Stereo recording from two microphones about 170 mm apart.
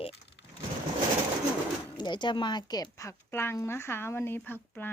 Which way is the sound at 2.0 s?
25° left (ahead or behind).